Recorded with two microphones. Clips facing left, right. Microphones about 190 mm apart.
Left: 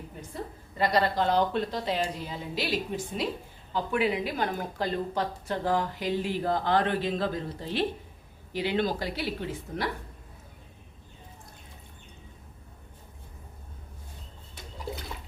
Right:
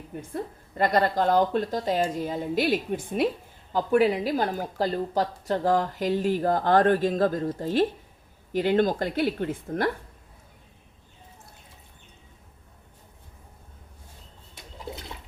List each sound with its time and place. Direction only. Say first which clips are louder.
0.1 s a woman's voice: right 7 dB; 60° right (ahead or behind)
3.7 s speech: right 6 dB; 40° right (ahead or behind)